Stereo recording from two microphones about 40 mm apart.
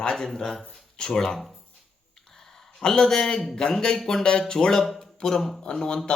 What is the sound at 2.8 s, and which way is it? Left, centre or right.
Speech, centre.